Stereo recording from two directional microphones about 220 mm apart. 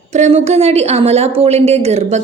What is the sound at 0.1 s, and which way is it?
Speech, 30° right (ahead or behind).